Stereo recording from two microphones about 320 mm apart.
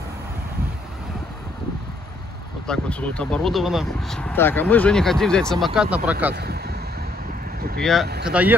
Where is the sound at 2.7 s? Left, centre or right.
Centre.